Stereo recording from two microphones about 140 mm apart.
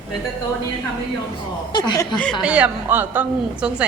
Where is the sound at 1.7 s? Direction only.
30° left (ahead or behind).